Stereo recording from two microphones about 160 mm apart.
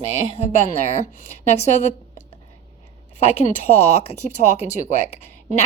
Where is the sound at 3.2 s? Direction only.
45° left (ahead or behind).